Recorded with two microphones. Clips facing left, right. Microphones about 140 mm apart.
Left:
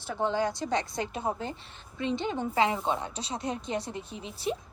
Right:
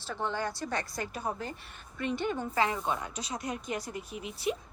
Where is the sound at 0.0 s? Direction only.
15° left (ahead or behind); by 4.5 s 30° left (ahead or behind).